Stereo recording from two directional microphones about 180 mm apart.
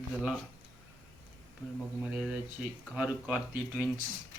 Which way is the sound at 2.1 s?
5° right (ahead or behind).